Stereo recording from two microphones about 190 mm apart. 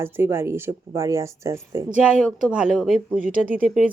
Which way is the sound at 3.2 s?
45° right (ahead or behind).